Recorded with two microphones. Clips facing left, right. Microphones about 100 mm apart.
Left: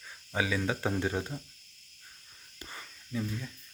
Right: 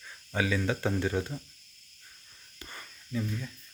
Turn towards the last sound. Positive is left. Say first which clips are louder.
# right 1 dB
turn(degrees=10)  # may be behind; listen again after turning